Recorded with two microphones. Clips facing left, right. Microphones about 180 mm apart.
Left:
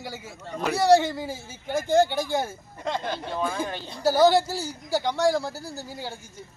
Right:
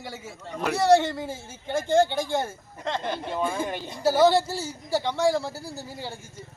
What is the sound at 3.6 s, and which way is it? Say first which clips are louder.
Speech: right 2 dB; 15° right (ahead or behind).